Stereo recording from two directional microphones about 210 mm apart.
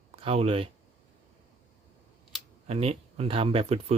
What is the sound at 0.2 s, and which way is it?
Speech, 30° right (ahead or behind).